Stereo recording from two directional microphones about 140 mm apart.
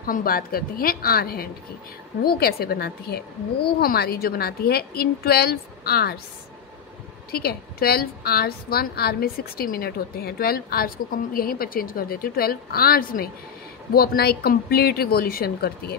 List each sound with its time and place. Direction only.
0.0 s a woman's voice: 90° left
7.2 s a woman's voice: 90° left